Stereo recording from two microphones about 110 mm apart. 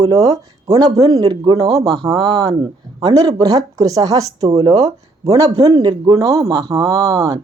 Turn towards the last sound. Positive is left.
turn(degrees=-35)  # may be behind; listen again after turning